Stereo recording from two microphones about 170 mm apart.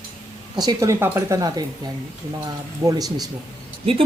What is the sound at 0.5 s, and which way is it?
Speech, 25° right (ahead or behind).